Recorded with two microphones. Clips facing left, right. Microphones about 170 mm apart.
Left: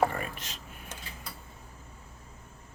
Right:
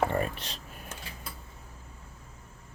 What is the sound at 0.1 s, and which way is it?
Typing, 30° right (ahead or behind).